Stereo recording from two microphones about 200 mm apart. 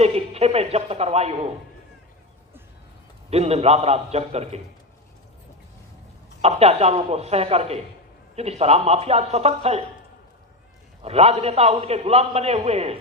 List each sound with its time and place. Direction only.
0.0 s a man's voice: 30° right (ahead or behind)
3.2 s a man's voice: 30° right (ahead or behind)
6.4 s a man's voice: 30° right (ahead or behind)
11.0 s a man's voice: 30° right (ahead or behind)